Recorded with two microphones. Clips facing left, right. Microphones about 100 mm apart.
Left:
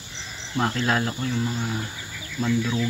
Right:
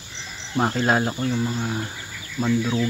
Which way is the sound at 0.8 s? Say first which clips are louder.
Right 3 dB; 30° right (ahead or behind).